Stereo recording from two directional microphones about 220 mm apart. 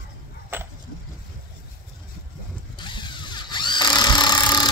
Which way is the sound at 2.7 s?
20° left (ahead or behind).